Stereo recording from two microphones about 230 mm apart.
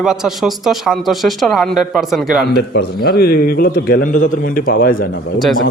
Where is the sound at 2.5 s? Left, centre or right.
Left.